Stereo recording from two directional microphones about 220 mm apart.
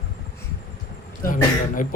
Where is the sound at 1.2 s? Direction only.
40° left (ahead or behind).